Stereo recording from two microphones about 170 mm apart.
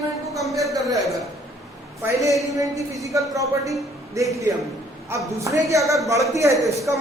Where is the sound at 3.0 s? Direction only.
20° right (ahead or behind).